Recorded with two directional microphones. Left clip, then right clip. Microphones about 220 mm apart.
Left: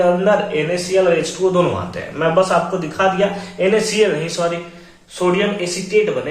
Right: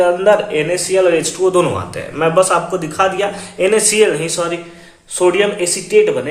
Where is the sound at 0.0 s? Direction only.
50° right (ahead or behind).